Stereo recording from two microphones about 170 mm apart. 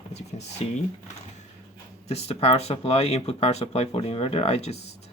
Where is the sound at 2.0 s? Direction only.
35° left (ahead or behind).